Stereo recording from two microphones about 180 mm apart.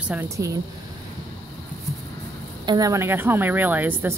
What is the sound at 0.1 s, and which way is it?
Speech, 15° right (ahead or behind).